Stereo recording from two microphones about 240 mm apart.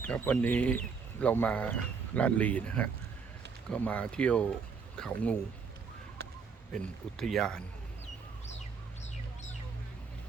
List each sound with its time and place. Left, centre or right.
0.0 s speech: centre
6.2 s a sound: right
6.7 s speech: centre